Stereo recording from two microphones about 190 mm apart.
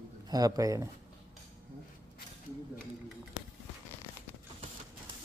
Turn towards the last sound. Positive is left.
turn(degrees=70)  # may be behind; listen again after turning